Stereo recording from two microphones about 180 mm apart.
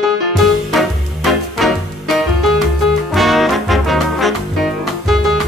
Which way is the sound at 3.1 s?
Centre (ahead or behind).